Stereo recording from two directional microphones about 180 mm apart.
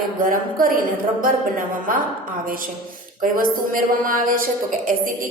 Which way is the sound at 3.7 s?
50° right (ahead or behind).